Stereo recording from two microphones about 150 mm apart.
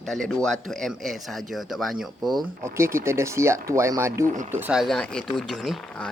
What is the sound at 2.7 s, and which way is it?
Speech, 15° right (ahead or behind).